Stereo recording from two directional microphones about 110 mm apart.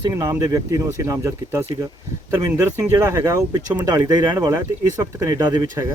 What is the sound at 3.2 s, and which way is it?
Speech, 30° right (ahead or behind).